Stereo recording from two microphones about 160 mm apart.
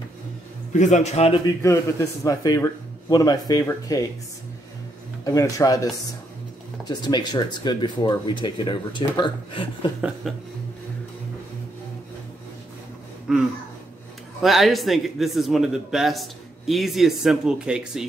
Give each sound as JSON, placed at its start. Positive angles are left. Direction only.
{"t": 0.7, "sound": "a man's voice", "side_deg": 50}
{"t": 1.6, "sound": "speech", "side_deg": 15}
{"t": 5.2, "sound": "speech", "side_deg": 20}
{"t": 10.3, "sound": "a man's voice", "side_deg": 0}
{"t": 13.3, "sound": "a man's voice", "side_deg": -5}